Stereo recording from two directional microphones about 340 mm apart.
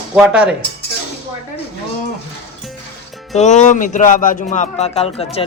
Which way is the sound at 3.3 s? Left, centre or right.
Left.